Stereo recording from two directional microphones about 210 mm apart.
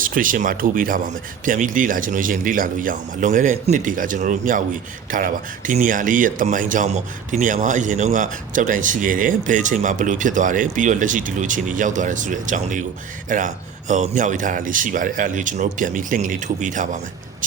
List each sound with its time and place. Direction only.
0.0 s a man's voice: 40° right (ahead or behind)